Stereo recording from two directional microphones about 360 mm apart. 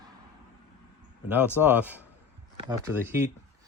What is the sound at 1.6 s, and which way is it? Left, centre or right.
Speech, centre.